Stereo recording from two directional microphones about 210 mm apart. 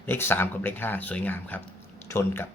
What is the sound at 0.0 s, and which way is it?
Speech, 10° left (ahead or behind).